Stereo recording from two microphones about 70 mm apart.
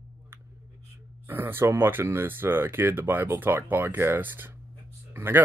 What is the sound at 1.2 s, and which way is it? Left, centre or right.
Speech, right.